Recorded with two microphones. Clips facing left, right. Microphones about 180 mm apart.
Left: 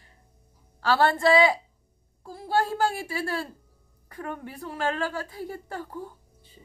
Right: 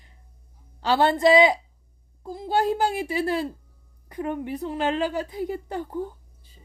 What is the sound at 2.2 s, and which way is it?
A woman's voice, 20° right (ahead or behind).